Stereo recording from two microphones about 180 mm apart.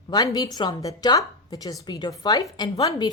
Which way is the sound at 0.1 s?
20° left (ahead or behind).